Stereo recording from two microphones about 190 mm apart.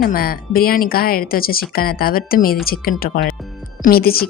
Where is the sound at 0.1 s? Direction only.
50° left (ahead or behind).